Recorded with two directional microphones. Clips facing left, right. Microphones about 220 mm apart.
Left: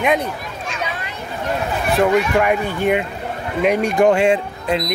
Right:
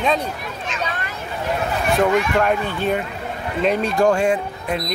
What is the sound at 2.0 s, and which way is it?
Speech, 10° left (ahead or behind).